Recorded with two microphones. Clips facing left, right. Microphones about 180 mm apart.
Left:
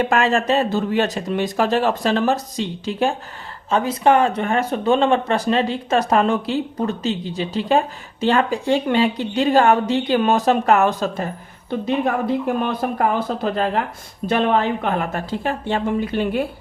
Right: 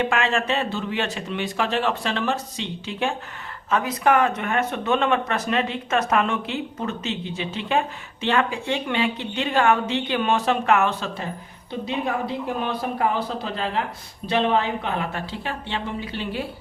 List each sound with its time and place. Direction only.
0.0 s a woman's voice: 40° left (ahead or behind)